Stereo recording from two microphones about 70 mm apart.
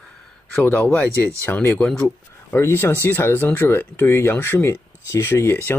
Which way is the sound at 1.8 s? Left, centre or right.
Centre.